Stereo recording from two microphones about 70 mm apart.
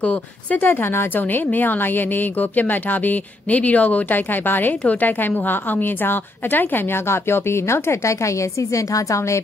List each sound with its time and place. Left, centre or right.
0.0 s speech: left